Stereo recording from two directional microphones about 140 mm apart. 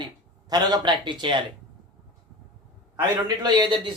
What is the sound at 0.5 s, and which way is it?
Speech, 30° right (ahead or behind).